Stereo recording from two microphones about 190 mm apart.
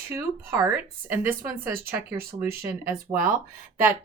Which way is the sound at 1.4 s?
50° right (ahead or behind).